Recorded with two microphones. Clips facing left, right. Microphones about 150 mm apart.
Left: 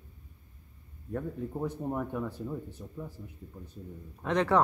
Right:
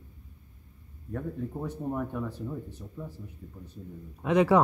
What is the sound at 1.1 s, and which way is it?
Speech, 10° left (ahead or behind).